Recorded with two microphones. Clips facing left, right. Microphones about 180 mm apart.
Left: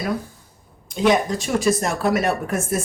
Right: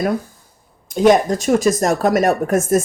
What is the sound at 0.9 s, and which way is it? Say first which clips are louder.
Speech: right 5 dB; 45° right (ahead or behind).